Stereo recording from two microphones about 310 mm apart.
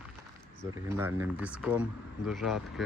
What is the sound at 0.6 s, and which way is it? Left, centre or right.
Speech, centre.